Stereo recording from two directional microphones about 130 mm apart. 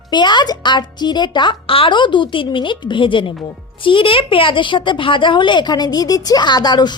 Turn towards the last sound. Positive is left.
turn(degrees=35)  # may be behind; listen again after turning